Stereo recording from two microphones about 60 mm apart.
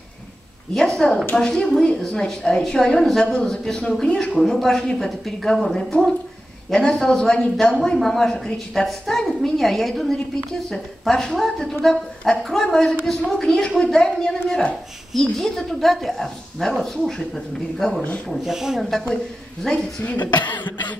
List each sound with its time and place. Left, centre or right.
0.7 s a woman's voice: centre
18.9 s a woman's voice: centre
20.0 s speech: left